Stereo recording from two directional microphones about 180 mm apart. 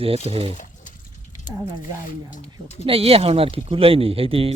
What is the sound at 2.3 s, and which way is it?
Speech, 40° left (ahead or behind).